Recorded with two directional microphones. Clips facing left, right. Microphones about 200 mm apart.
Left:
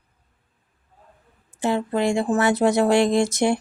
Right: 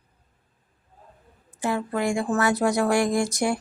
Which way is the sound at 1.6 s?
25° left (ahead or behind).